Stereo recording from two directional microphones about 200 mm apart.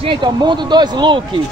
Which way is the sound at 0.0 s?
25° right (ahead or behind).